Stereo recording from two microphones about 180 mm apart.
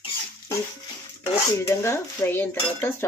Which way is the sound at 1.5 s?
15° left (ahead or behind).